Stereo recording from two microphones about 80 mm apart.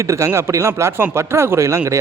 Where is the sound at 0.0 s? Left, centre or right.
Right.